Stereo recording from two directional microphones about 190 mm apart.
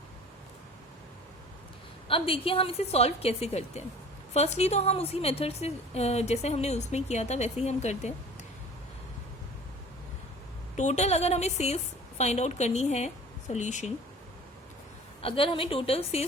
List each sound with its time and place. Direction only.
2.0 s a woman's voice: 30° left (ahead or behind)
10.8 s a woman's voice: 35° left (ahead or behind)
15.2 s a woman's voice: 30° left (ahead or behind)